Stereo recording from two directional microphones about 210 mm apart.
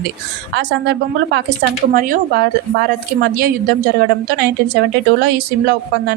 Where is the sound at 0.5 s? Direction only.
55° right (ahead or behind).